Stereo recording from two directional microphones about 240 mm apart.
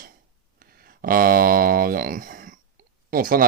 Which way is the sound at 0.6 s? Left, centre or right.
Right.